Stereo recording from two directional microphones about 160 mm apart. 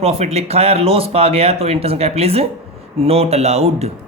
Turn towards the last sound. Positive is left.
turn(degrees=-40)  # may be behind; listen again after turning